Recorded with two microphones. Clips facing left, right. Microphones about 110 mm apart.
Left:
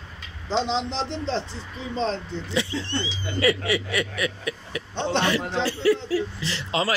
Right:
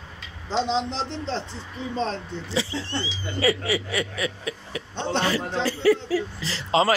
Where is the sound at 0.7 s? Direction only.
40° right (ahead or behind).